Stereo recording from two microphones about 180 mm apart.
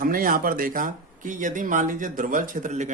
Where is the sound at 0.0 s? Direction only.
50° right (ahead or behind).